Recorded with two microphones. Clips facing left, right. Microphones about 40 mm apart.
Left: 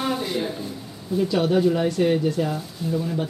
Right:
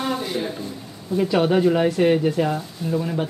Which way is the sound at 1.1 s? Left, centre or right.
Right.